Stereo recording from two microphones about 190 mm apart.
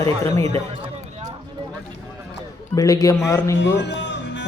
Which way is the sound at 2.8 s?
20° left (ahead or behind).